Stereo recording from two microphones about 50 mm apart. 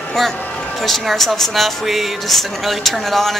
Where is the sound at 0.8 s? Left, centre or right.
Centre.